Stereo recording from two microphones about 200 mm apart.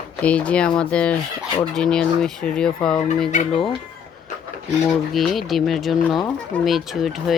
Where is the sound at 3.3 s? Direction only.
35° left (ahead or behind).